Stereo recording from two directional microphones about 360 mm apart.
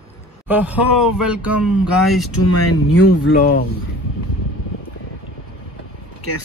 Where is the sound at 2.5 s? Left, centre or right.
Left.